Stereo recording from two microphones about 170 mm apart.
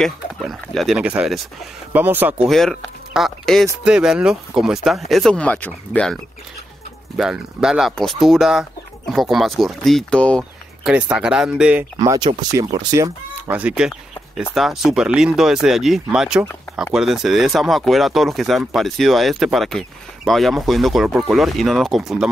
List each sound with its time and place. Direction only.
0.0 s speech: centre (ahead or behind)
7.2 s speech: 5° right (ahead or behind)
10.9 s speech: 5° right (ahead or behind)
12.0 s speech: 20° right (ahead or behind)
13.5 s speech: 5° right (ahead or behind)